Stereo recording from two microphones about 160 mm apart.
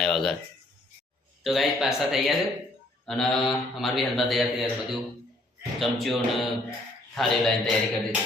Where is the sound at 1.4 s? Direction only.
Centre (ahead or behind).